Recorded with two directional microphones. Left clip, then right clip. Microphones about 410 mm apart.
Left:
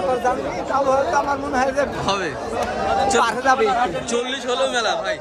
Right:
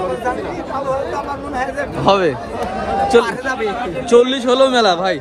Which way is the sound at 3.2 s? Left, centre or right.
Centre.